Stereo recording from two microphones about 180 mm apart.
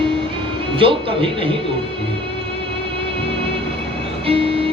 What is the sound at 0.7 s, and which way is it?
Speech, 30° right (ahead or behind).